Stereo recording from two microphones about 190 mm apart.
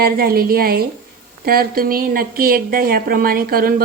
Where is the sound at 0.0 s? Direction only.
50° right (ahead or behind).